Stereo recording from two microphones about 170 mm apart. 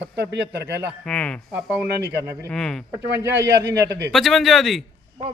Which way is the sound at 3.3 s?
90° right.